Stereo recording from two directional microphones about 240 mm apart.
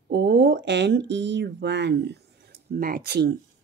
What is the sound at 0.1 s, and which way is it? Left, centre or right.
A woman's voice, right.